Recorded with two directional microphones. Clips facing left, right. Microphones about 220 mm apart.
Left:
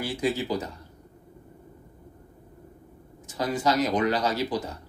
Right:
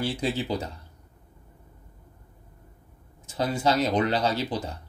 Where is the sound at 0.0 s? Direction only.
30° right (ahead or behind).